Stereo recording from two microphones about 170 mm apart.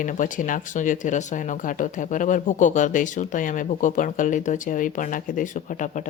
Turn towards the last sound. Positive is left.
turn(degrees=45)  # may be behind; listen again after turning